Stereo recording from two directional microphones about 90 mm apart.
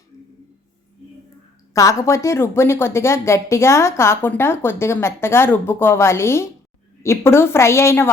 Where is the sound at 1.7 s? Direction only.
35° left (ahead or behind).